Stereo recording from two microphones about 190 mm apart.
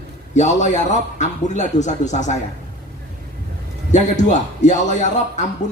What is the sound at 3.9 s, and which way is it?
Speech, 40° left (ahead or behind).